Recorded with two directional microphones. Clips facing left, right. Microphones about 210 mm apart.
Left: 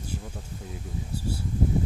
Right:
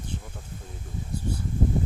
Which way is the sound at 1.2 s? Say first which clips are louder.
Right 1 dB; 10° left (ahead or behind).